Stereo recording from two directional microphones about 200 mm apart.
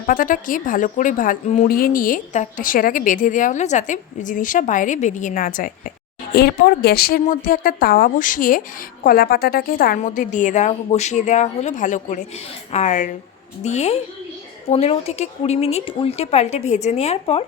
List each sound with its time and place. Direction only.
0.1 s a woman's voice: 40° left (ahead or behind)